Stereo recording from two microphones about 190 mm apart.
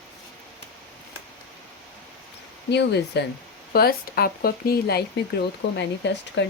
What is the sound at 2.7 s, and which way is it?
Speech, 65° left (ahead or behind).